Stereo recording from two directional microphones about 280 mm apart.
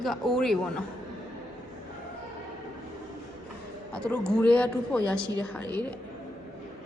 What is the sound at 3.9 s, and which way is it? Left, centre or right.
A woman's voice, centre.